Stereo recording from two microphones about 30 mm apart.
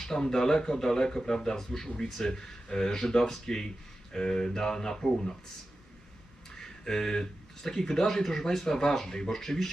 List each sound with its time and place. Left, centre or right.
0.0 s speech: centre
6.6 s speech: centre